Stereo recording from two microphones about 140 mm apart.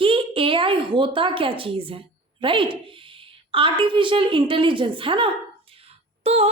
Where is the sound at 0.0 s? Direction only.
40° right (ahead or behind).